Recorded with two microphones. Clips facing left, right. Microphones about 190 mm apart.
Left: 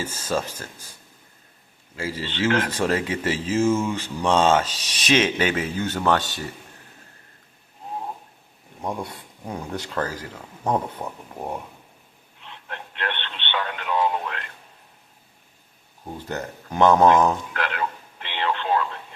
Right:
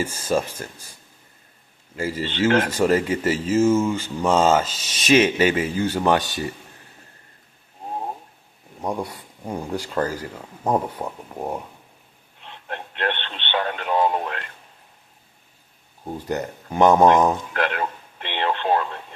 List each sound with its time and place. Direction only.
0.0 s speech: 10° right (ahead or behind)
2.7 s speech: 10° right (ahead or behind)
9.0 s speech: centre (ahead or behind)
9.4 s speech: 15° right (ahead or behind)
12.6 s radio: 40° right (ahead or behind)
16.0 s speech: 15° right (ahead or behind)
17.6 s radio: 50° right (ahead or behind)